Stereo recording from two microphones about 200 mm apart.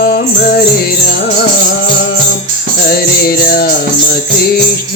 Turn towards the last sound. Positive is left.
turn(degrees=50)  # may be behind; listen again after turning